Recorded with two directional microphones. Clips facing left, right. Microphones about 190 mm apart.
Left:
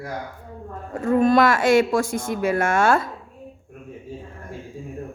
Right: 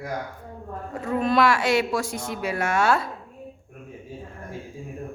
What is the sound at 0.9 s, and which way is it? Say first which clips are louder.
A woman's voice: left 6 dB; 45° left (ahead or behind).